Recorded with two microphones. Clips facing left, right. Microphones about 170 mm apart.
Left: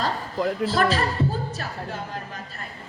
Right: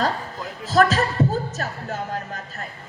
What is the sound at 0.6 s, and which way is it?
A woman's voice, 45° right (ahead or behind).